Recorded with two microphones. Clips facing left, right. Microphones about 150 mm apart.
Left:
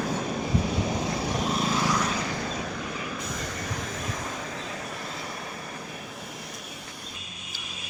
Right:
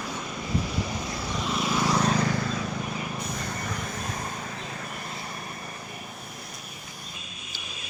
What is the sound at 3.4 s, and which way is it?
Vehicle, 90° left.